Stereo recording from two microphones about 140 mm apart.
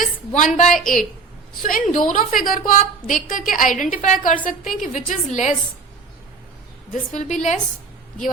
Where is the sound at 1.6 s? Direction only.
75° left (ahead or behind); by 5.5 s 60° left (ahead or behind).